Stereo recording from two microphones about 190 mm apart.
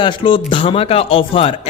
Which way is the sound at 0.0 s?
25° left (ahead or behind).